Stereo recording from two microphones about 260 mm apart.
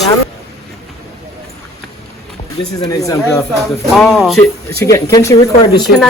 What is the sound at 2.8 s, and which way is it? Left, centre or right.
Speech, centre.